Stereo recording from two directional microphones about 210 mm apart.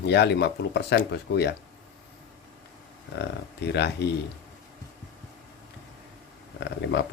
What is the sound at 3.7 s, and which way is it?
Speech, 55° left (ahead or behind).